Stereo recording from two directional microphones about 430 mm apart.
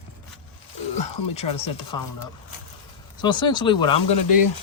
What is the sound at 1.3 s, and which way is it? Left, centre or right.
Speech, centre.